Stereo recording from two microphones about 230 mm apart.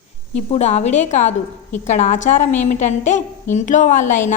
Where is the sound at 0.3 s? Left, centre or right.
Left.